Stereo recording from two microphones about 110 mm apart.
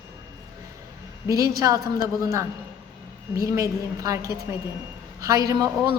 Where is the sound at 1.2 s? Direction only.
30° right (ahead or behind).